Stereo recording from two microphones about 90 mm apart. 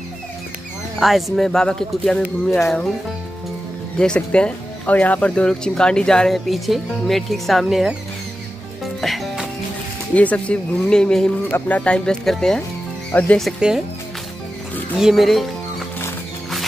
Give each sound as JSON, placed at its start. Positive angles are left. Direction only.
{"t": 0.9, "sound": "speech", "side_deg": 0}
{"t": 4.0, "sound": "speech", "side_deg": 10}
{"t": 9.0, "sound": "music", "side_deg": 0}
{"t": 10.1, "sound": "speech", "side_deg": 15}
{"t": 13.1, "sound": "speech", "side_deg": 20}
{"t": 13.6, "sound": "speech", "side_deg": -10}
{"t": 15.0, "sound": "speech", "side_deg": -5}